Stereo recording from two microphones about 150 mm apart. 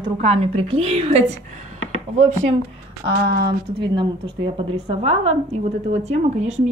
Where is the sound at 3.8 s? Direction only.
30° right (ahead or behind).